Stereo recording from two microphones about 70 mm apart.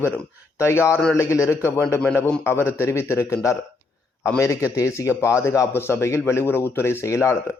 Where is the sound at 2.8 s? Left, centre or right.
Left.